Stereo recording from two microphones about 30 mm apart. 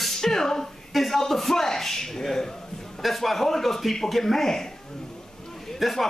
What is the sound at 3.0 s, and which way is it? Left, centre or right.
A man's voice, centre.